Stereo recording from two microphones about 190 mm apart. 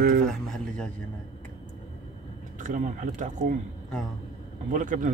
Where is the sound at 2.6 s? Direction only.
40° right (ahead or behind).